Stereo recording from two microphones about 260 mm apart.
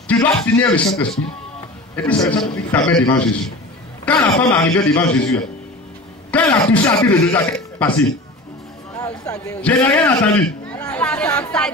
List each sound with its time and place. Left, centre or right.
0.2 s a man's voice: centre
9.0 s a man's voice: centre